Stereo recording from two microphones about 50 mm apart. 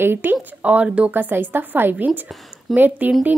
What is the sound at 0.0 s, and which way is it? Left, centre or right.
Speech, right.